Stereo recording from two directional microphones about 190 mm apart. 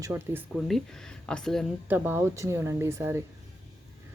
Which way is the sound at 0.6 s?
Centre (ahead or behind).